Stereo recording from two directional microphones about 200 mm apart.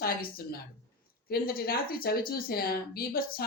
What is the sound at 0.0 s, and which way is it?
A woman's voice, 50° left (ahead or behind).